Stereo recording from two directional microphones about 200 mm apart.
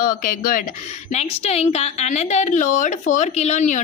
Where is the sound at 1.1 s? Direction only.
30° left (ahead or behind).